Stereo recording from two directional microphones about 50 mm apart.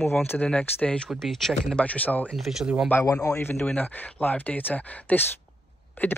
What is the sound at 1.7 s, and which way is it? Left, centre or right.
Speech, left.